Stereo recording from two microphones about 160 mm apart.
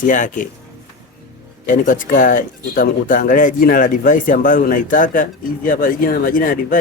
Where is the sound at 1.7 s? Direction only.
55° left (ahead or behind).